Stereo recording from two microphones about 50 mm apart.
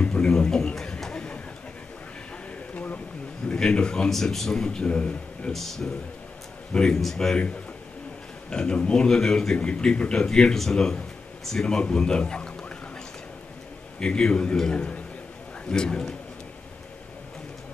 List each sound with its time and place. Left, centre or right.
0.0 s a sound: centre
2.7 s a sound: left
3.5 s speech: centre
4.1 s speech: centre
5.5 s speech: centre
8.5 s speech: centre
13.9 s speech: centre